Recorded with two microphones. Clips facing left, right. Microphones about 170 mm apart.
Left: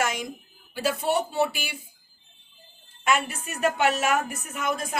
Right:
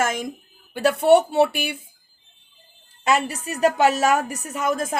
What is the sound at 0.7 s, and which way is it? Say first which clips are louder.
Speech: right 10 dB; 65° right (ahead or behind).